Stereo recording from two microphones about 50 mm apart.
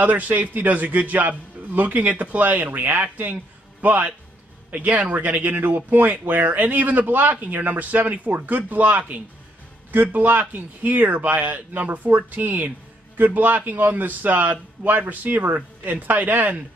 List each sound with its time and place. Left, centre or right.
0.0 s a man's voice: right